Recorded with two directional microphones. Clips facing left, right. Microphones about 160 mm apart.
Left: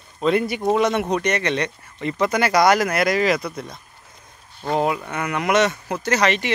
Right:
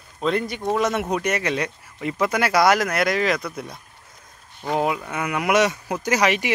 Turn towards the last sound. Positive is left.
turn(degrees=-10)  # may be behind; listen again after turning